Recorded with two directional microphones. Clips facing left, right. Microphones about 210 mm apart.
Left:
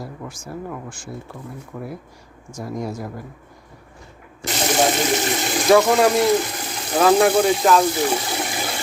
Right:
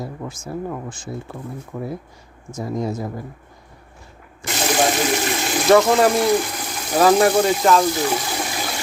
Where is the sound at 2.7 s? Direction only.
25° right (ahead or behind).